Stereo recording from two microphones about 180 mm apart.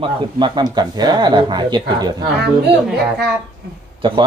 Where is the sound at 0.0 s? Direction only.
25° right (ahead or behind).